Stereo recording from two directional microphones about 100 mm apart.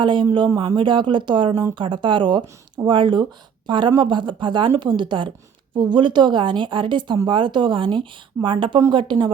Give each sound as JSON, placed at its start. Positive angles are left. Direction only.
{"t": 0.0, "sound": "speech", "side_deg": -55}